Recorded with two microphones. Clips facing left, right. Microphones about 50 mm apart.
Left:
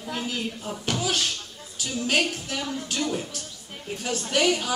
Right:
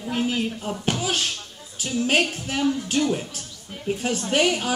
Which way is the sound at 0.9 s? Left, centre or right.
Right.